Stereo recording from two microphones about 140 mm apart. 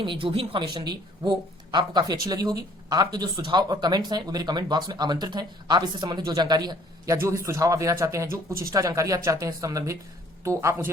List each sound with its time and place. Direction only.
0.0 s a woman's voice: 35° right (ahead or behind); by 10.9 s 20° right (ahead or behind)